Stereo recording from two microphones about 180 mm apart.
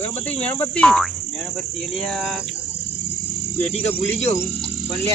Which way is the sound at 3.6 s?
40° left (ahead or behind).